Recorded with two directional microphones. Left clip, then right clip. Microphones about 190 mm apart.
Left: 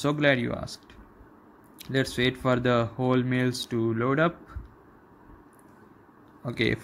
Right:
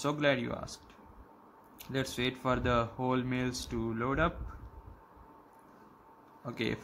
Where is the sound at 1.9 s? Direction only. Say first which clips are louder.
Left 8 dB; 10° left (ahead or behind).